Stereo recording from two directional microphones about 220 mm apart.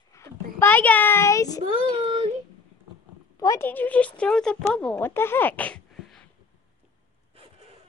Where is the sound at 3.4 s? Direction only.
15° left (ahead or behind).